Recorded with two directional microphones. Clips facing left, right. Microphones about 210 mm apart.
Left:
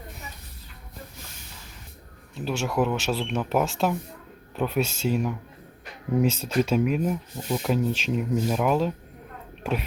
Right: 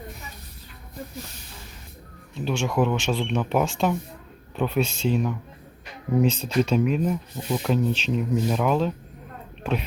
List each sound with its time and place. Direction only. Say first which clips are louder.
2.4 s speech: right 2 dB; 5° left (ahead or behind)